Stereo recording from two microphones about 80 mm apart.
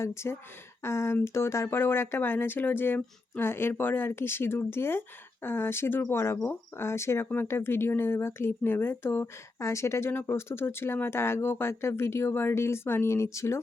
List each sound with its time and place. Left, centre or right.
0.0 s speech: left